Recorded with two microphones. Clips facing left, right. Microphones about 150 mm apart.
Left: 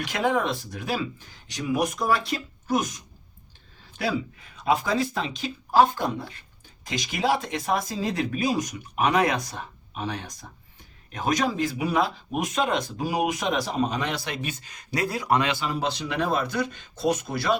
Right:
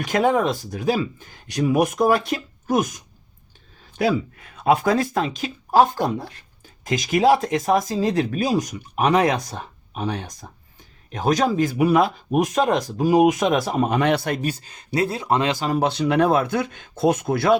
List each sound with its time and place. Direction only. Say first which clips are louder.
0.0 s speech: right 6 dB; 45° right (ahead or behind)
1.5 s speech: right 6 dB; 60° right (ahead or behind)
4.6 s speech: right 5 dB; 55° right (ahead or behind)
14.5 s speech: right 6 dB; 30° right (ahead or behind)
15.5 s speech: right 6 dB; 40° right (ahead or behind)
15.8 s speech: right 8 dB; 60° right (ahead or behind)